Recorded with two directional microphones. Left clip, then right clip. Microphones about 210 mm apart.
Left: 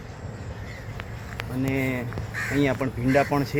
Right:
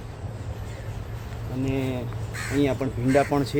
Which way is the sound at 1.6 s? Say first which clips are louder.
Left 1 dB; 15° left (ahead or behind).